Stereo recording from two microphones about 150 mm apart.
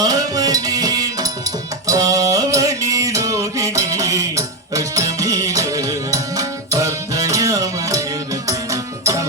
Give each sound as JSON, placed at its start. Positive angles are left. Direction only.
{"t": 0.0, "sound": "music", "side_deg": -25}